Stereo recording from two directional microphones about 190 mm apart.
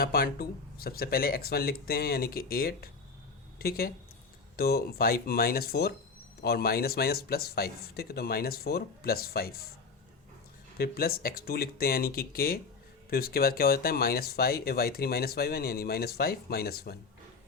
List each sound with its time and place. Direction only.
0.0 s speech: 50° left (ahead or behind)
10.8 s speech: 55° left (ahead or behind)